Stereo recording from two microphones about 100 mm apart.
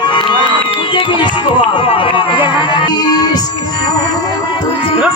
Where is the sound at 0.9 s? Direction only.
55° left (ahead or behind).